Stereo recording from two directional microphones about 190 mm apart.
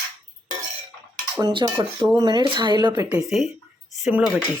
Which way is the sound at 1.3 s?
20° right (ahead or behind).